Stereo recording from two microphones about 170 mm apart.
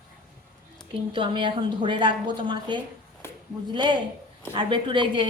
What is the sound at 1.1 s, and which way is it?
A woman's voice, 30° right (ahead or behind).